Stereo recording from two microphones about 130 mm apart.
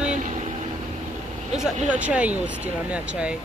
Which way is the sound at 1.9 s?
10° right (ahead or behind).